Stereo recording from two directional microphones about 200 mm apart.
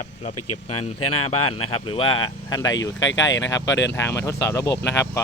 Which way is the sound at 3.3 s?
70° left (ahead or behind).